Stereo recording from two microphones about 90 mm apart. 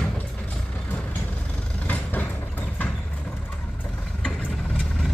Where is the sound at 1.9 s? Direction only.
20° left (ahead or behind).